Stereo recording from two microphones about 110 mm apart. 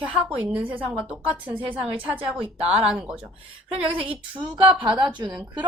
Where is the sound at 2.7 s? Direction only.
10° right (ahead or behind).